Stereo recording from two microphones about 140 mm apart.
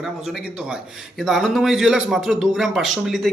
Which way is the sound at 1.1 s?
Centre (ahead or behind).